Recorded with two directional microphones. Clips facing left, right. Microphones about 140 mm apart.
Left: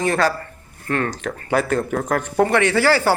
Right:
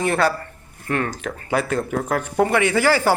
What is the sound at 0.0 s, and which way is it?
A man's voice, 10° right (ahead or behind).